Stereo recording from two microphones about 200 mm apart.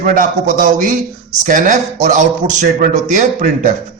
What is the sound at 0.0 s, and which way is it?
A man's voice, 45° right (ahead or behind).